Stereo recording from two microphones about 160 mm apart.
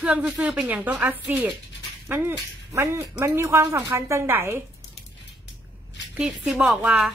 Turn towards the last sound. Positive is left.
turn(degrees=-10)  # may be behind; listen again after turning